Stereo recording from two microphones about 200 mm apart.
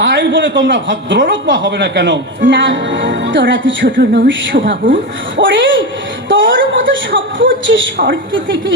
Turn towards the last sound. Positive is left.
turn(degrees=-70)  # may be behind; listen again after turning